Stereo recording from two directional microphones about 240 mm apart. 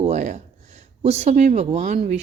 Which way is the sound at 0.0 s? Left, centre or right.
Right.